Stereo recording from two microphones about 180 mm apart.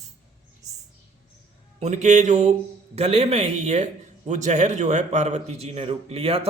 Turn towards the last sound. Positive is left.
turn(degrees=-30)  # may be behind; listen again after turning